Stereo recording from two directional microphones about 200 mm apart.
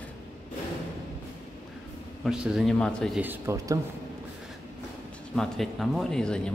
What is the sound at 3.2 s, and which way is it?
Speech, 10° right (ahead or behind).